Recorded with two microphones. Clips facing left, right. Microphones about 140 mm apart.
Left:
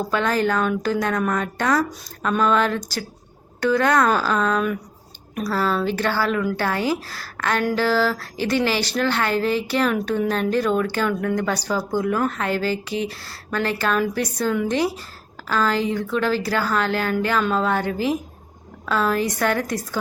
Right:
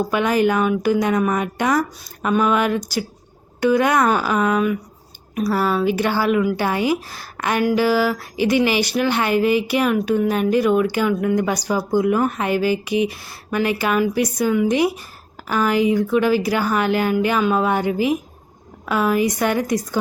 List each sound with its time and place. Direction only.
0.0 s a woman's voice: 15° right (ahead or behind)